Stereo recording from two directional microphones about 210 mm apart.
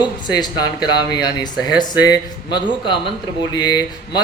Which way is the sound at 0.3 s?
20° left (ahead or behind).